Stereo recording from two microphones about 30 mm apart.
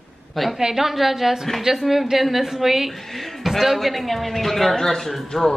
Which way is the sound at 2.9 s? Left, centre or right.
Centre.